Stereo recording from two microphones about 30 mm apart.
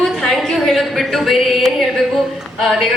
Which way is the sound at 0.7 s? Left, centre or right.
Centre.